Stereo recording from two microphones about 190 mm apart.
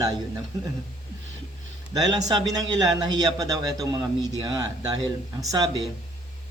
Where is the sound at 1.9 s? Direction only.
20° right (ahead or behind).